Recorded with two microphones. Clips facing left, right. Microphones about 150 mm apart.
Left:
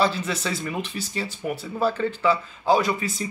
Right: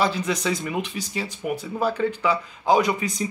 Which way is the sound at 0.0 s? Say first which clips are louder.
Right 1 dB; 15° right (ahead or behind).